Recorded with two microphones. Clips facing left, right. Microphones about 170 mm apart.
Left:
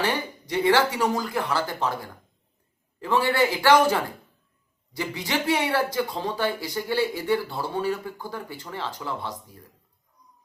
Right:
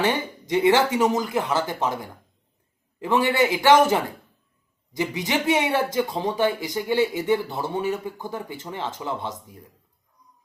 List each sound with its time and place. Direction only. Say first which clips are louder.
0.0 s speech: right 3 dB; 20° right (ahead or behind)